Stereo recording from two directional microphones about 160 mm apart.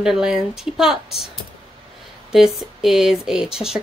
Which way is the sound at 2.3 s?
Centre (ahead or behind).